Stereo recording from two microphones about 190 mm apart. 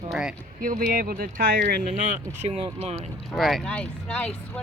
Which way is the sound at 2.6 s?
35° right (ahead or behind).